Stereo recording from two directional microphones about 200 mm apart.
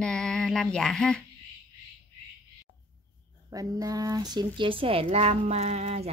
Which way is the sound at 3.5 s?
15° right (ahead or behind).